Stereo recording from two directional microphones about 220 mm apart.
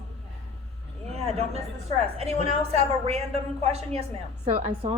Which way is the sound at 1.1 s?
30° right (ahead or behind).